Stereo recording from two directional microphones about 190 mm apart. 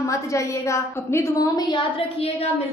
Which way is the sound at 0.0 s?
15° left (ahead or behind).